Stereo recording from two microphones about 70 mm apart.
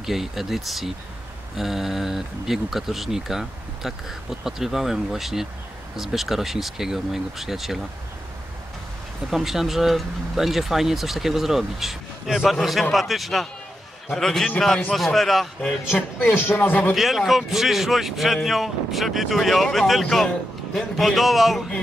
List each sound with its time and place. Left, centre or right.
0.0 s speech: centre
9.3 s speech: centre
16.3 s speech: left
16.9 s speech: centre